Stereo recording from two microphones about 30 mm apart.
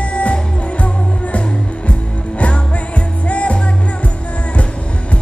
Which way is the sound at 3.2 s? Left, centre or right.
Left.